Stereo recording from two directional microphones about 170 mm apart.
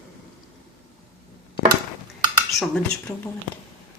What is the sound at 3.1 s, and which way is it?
Speech, 15° left (ahead or behind).